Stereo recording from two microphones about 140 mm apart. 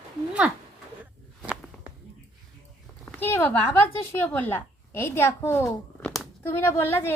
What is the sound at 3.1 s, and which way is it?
A woman's voice, 15° left (ahead or behind).